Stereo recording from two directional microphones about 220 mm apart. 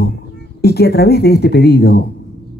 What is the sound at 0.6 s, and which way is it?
Speech, 45° left (ahead or behind).